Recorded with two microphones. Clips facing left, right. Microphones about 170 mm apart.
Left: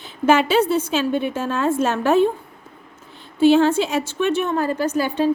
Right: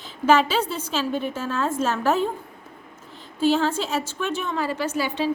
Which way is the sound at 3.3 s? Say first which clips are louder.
Left 7 dB; 65° left (ahead or behind).